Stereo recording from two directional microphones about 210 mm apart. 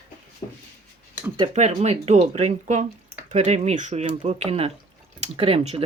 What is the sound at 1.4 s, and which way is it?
Speech, 30° right (ahead or behind).